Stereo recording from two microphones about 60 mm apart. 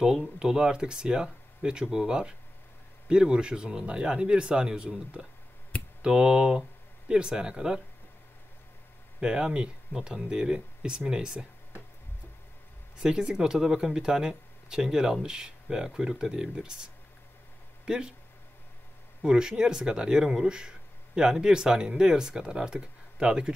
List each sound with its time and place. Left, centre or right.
0.4 s speech: centre
9.2 s speech: centre
13.0 s speech: centre
19.2 s speech: centre